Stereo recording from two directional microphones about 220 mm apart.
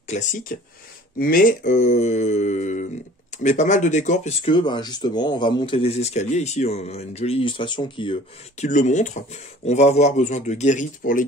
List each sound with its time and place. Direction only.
0.1 s speech: 35° left (ahead or behind)